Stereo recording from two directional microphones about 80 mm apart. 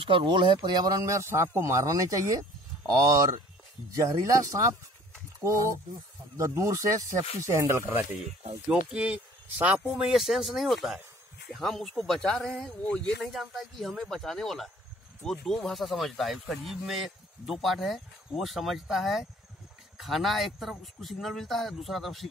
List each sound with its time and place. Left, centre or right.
0.1 s speech: right
1.0 s speech: right
8.6 s speech: centre
10.0 s speech: centre